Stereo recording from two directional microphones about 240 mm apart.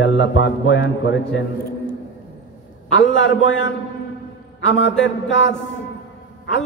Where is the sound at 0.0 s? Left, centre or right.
Left.